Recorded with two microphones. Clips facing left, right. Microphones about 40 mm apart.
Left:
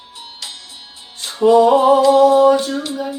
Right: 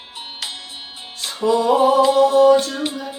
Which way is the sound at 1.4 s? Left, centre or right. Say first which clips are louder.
Left 6 dB; centre.